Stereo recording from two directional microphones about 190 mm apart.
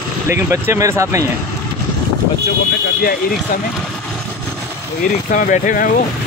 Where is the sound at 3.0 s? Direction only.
50° left (ahead or behind).